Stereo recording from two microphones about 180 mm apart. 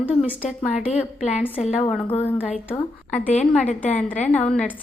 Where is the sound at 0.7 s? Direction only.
40° left (ahead or behind).